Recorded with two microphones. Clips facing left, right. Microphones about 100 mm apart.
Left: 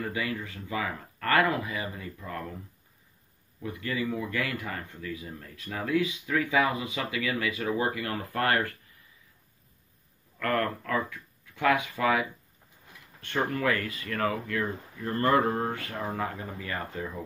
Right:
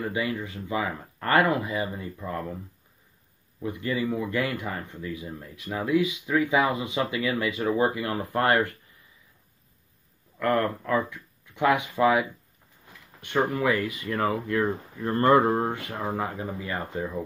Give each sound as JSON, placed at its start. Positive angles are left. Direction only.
{"t": 0.0, "sound": "speech", "side_deg": -20}
{"t": 3.5, "sound": "speech", "side_deg": -25}
{"t": 10.4, "sound": "speech", "side_deg": -20}
{"t": 13.5, "sound": "speech", "side_deg": -15}